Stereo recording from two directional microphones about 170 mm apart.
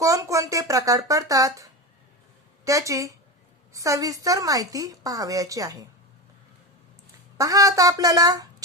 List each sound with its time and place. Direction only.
0.0 s a woman's voice: 20° right (ahead or behind)
7.3 s a woman's voice: 20° right (ahead or behind)